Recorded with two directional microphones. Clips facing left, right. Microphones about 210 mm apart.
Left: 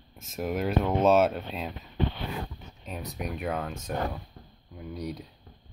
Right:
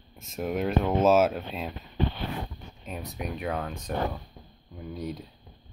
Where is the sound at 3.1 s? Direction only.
Centre (ahead or behind).